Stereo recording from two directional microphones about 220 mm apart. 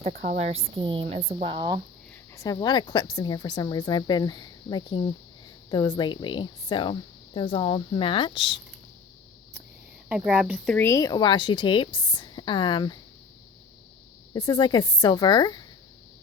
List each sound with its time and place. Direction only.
0.1 s speech: 40° right (ahead or behind)
0.3 s speech: 30° right (ahead or behind)
2.3 s speech: 15° left (ahead or behind)
10.1 s speech: 5° right (ahead or behind)
10.8 s speech: 15° left (ahead or behind)
14.3 s speech: 20° left (ahead or behind)